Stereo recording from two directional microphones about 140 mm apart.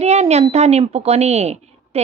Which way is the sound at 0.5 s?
50° right (ahead or behind).